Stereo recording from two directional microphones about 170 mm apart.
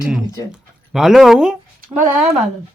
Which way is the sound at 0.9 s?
Centre (ahead or behind).